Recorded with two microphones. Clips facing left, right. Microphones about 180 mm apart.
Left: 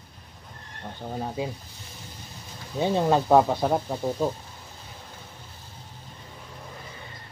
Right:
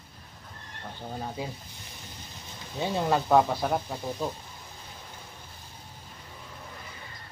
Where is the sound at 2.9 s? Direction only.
20° left (ahead or behind).